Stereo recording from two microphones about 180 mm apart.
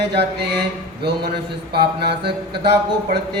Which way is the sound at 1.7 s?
65° right (ahead or behind).